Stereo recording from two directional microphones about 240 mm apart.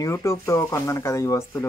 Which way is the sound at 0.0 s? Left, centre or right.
Centre.